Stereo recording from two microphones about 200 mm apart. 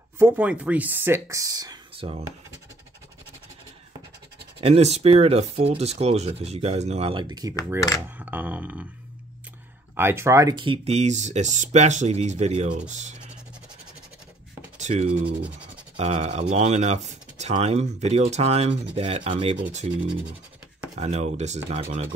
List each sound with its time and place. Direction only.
0.2 s speech: 5° right (ahead or behind); by 2.2 s 30° right (ahead or behind)
4.6 s speech: 30° right (ahead or behind)
8.2 s speech: 10° right (ahead or behind)
9.9 s speech: 10° right (ahead or behind); by 13.2 s 35° right (ahead or behind)
14.8 s a sound: 35° right (ahead or behind)
16.0 s speech: 35° right (ahead or behind)
18.9 s rub: 30° right (ahead or behind)
19.9 s speech: 5° right (ahead or behind)
20.9 s speech: 35° right (ahead or behind)